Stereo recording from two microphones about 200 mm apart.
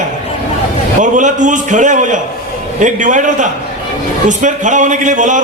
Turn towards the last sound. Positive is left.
turn(degrees=-40)  # may be behind; listen again after turning